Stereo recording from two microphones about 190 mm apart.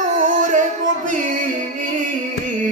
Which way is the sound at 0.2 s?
40° right (ahead or behind).